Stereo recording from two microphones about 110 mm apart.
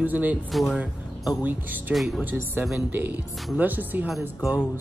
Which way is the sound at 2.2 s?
15° right (ahead or behind).